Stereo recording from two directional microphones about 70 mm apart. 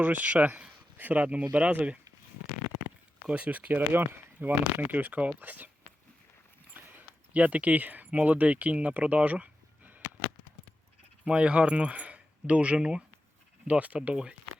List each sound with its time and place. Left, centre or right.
0.0 s speech: right
3.2 s speech: centre
6.7 s speech: right
11.3 s speech: centre